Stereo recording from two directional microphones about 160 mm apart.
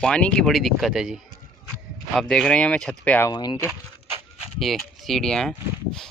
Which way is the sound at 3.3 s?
25° left (ahead or behind).